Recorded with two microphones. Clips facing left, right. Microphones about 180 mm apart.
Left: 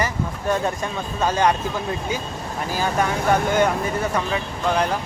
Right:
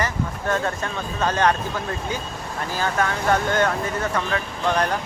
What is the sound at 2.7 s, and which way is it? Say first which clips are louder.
Speech: left 2 dB; 15° left (ahead or behind).